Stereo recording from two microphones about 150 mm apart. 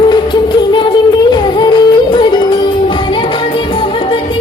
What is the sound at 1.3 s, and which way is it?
Music, 30° left (ahead or behind).